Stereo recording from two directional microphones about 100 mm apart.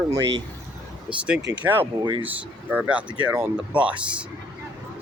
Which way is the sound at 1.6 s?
20° right (ahead or behind).